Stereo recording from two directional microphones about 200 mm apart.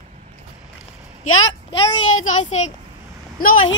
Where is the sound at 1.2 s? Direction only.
90° left.